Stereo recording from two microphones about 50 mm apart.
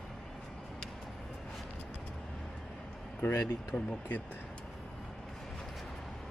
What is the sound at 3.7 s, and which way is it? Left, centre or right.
Speech, centre.